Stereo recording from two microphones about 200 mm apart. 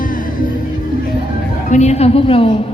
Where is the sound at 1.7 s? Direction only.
35° left (ahead or behind).